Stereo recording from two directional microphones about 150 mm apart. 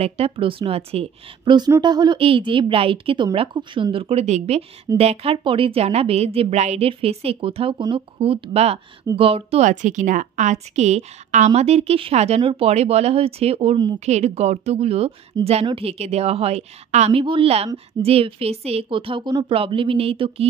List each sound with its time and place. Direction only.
0.0 s a woman's voice: 40° right (ahead or behind)